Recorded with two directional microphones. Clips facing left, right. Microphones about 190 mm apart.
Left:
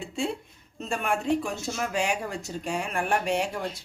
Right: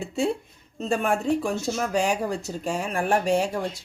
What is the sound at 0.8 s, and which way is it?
Speech, 40° right (ahead or behind).